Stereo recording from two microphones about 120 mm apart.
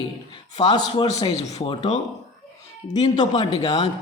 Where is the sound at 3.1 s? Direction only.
35° left (ahead or behind).